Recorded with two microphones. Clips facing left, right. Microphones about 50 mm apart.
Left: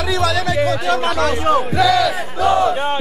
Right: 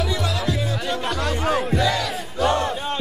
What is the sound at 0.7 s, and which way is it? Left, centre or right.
Speech, left.